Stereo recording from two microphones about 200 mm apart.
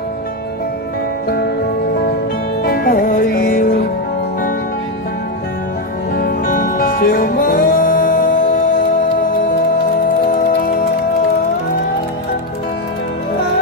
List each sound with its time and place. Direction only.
2.6 s music: 50° left (ahead or behind)
6.1 s music: 45° left (ahead or behind)